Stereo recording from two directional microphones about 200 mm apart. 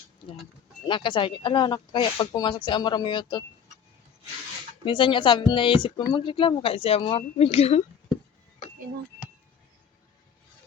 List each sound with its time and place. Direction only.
0.9 s speech: 25° left (ahead or behind)
4.9 s speech: 25° left (ahead or behind)